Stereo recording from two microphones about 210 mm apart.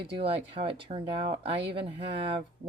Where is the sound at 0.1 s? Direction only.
25° right (ahead or behind).